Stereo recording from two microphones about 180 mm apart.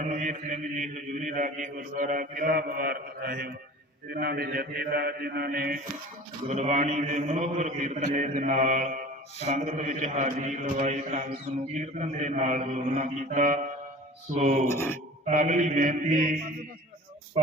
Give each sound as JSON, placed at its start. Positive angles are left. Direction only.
{"t": 0.0, "sound": "mantra", "side_deg": -40}
{"t": 6.5, "sound": "a man's voice", "side_deg": -40}
{"t": 14.7, "sound": "speech", "side_deg": 15}
{"t": 15.3, "sound": "mantra", "side_deg": -45}